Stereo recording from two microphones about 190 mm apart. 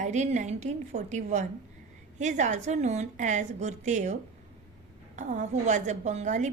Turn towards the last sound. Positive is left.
turn(degrees=-40)  # may be behind; listen again after turning